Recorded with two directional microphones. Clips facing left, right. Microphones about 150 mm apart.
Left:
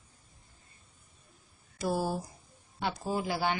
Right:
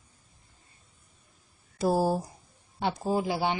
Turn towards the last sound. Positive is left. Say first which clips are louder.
# right 4 dB
turn(degrees=-25)  # may be behind; listen again after turning